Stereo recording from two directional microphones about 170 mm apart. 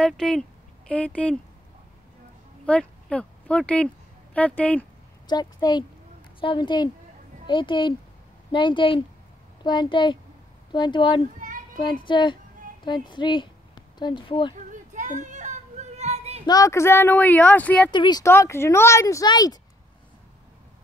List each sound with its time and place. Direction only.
0.0 s speech: 5° left (ahead or behind)
2.6 s speech: 5° left (ahead or behind)
5.2 s a woman's voice: 25° left (ahead or behind)
11.3 s children playing: 50° right (ahead or behind)
11.8 s a woman's voice: 30° left (ahead or behind)
14.7 s a sound: 45° right (ahead or behind)
16.4 s speech: 20° left (ahead or behind)
17.9 s speech: 25° left (ahead or behind)